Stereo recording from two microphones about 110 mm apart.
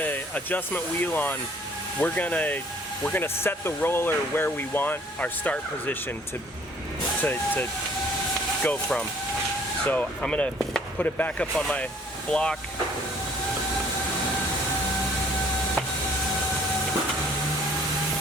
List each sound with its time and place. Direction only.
0.0 s speech: 15° left (ahead or behind)
7.2 s speech: 15° left (ahead or behind)
8.6 s speech: 10° left (ahead or behind)